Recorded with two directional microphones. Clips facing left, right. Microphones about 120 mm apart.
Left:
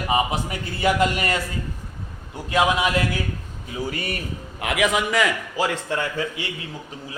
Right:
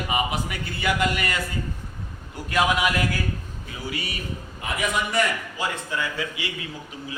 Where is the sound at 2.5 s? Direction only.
25° left (ahead or behind).